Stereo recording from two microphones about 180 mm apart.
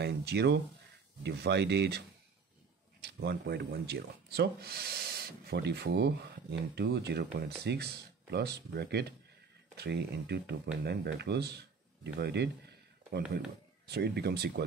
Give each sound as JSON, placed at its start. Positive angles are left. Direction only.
{"t": 0.0, "sound": "speech", "side_deg": -65}
{"t": 13.8, "sound": "speech", "side_deg": -65}